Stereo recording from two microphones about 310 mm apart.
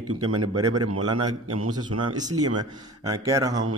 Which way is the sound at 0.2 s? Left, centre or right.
Right.